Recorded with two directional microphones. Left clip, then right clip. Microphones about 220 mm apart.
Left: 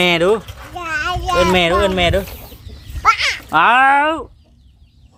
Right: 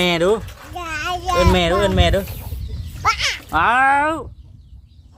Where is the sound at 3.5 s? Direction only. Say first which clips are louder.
Left 4 dB; 10° left (ahead or behind).